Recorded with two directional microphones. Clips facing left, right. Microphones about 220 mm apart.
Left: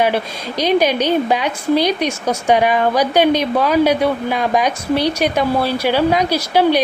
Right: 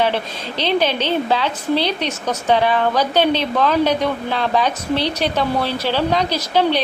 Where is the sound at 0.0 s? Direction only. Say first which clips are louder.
Left 2 dB; 10° left (ahead or behind).